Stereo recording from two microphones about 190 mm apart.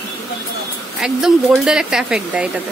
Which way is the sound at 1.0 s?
Centre (ahead or behind).